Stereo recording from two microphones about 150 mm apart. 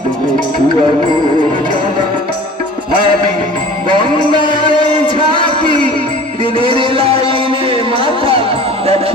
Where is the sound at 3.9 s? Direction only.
35° right (ahead or behind).